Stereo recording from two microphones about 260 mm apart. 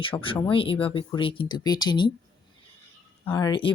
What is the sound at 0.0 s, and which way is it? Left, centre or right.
Speech, centre.